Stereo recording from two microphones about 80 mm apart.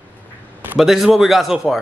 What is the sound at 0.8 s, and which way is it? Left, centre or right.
Speech, centre.